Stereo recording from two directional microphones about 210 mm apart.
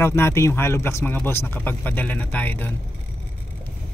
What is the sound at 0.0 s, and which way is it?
Speech, 10° left (ahead or behind).